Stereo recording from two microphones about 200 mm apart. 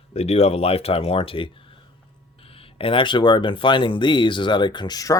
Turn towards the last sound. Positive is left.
turn(degrees=20)  # may be behind; listen again after turning